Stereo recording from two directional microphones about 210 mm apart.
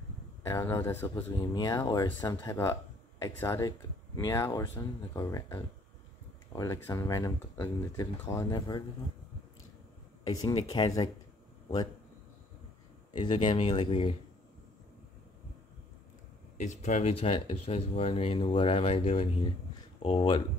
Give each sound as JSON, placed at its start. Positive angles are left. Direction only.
{"t": 0.5, "sound": "speech", "side_deg": 15}
{"t": 10.2, "sound": "speech", "side_deg": 20}
{"t": 13.2, "sound": "speech", "side_deg": 25}
{"t": 16.5, "sound": "speech", "side_deg": 35}